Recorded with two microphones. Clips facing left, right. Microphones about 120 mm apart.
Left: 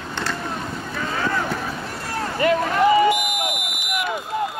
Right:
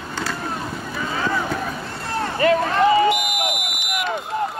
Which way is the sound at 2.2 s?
30° right (ahead or behind).